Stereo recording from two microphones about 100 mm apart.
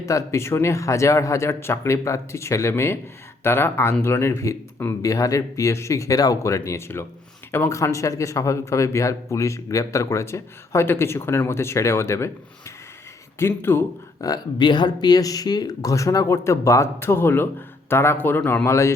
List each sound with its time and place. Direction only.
0.0 s speech: 30° left (ahead or behind)
14.2 s speech: 40° left (ahead or behind); by 18.9 s 25° left (ahead or behind)